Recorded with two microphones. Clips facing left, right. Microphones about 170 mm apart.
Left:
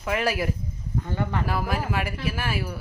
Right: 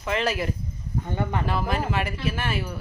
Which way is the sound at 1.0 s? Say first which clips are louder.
Right 1 dB; 20° right (ahead or behind).